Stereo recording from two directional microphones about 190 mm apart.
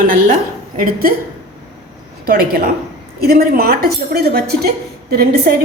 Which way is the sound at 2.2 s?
50° right (ahead or behind).